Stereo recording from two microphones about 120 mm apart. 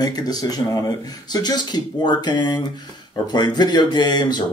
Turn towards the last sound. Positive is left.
turn(degrees=35)  # may be behind; listen again after turning